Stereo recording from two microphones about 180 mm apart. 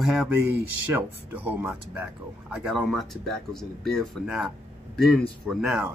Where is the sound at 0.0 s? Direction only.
Centre (ahead or behind).